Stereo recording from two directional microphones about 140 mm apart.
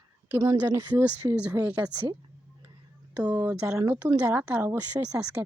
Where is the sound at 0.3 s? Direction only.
20° right (ahead or behind).